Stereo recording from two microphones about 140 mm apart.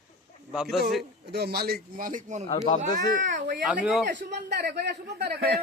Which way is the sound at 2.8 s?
65° right (ahead or behind).